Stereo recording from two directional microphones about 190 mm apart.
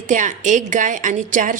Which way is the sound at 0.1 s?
40° right (ahead or behind).